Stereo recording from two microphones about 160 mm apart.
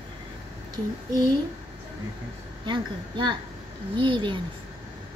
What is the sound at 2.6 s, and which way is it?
A woman's voice, 30° right (ahead or behind).